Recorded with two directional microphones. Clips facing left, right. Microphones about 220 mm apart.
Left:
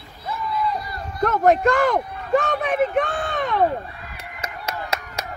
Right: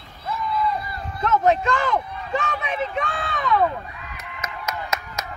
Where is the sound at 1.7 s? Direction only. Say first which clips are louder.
Left 4 dB; 40° left (ahead or behind).